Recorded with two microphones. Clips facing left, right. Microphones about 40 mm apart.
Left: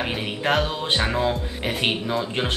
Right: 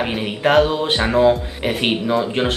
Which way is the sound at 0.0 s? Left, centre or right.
Centre.